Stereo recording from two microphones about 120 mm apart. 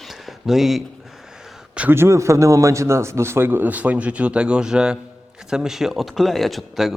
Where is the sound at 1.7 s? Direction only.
15° right (ahead or behind).